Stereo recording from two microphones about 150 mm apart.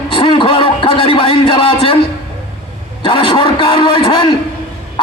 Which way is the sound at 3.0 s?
35° left (ahead or behind).